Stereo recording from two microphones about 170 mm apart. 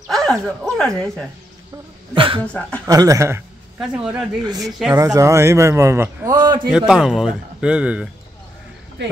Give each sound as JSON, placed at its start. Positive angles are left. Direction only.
{"t": 0.0, "sound": "speech", "side_deg": 0}
{"t": 2.1, "sound": "speech", "side_deg": -30}
{"t": 2.4, "sound": "speech", "side_deg": 5}
{"t": 2.9, "sound": "a man's voice", "side_deg": -20}
{"t": 4.4, "sound": "speech", "side_deg": -20}
{"t": 4.6, "sound": "speech", "side_deg": 0}
{"t": 4.9, "sound": "a man's voice", "side_deg": -20}
{"t": 6.9, "sound": "speech", "side_deg": -5}